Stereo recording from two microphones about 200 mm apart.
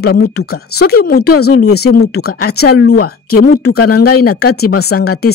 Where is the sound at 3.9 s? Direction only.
50° left (ahead or behind).